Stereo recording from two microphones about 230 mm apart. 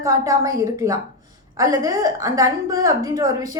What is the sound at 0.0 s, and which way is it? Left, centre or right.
A woman's voice, centre.